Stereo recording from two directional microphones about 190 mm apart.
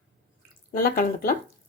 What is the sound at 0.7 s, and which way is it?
Speech, 50° left (ahead or behind).